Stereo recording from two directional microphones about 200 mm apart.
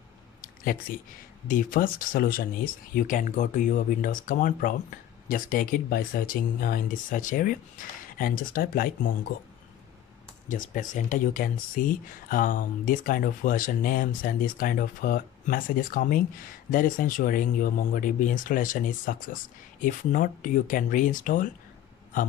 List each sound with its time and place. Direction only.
1.5 s speech: 45° left (ahead or behind)
10.5 s speech: 40° left (ahead or behind)